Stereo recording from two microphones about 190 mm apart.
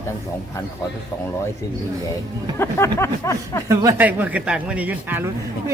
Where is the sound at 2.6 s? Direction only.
15° left (ahead or behind).